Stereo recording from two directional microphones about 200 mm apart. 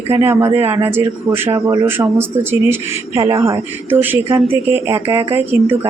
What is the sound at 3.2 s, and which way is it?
Speech, 25° right (ahead or behind).